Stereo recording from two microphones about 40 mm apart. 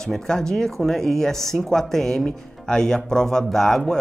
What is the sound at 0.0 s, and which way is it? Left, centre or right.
Speech, centre.